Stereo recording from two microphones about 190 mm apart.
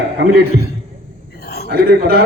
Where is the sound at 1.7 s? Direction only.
55° right (ahead or behind).